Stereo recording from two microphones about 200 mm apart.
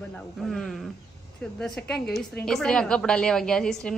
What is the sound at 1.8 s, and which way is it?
A woman's voice, 5° left (ahead or behind).